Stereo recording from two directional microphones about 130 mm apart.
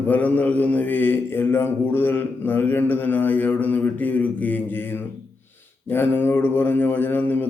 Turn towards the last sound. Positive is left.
turn(degrees=15)  # may be behind; listen again after turning